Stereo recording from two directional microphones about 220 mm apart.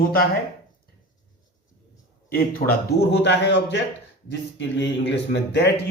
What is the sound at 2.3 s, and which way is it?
A man's voice, 40° left (ahead or behind).